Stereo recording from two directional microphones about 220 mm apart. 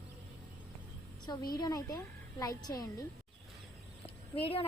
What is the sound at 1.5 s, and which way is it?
A woman's voice, 15° left (ahead or behind).